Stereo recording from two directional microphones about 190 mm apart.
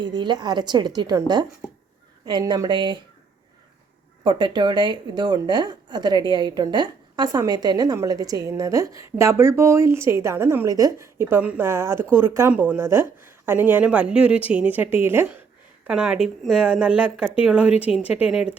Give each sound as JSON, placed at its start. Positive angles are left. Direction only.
{"t": 0.0, "sound": "speech", "side_deg": -25}
{"t": 2.2, "sound": "speech", "side_deg": -25}
{"t": 4.2, "sound": "a woman's voice", "side_deg": -25}